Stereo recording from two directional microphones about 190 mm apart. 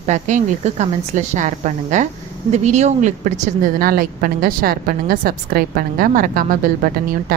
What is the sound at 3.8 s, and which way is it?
A woman's voice, 50° right (ahead or behind).